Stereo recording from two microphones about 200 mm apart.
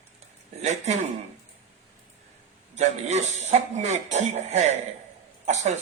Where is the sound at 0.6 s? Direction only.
35° right (ahead or behind).